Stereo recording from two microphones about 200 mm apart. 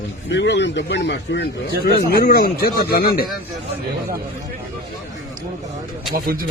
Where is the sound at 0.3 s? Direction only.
60° left (ahead or behind).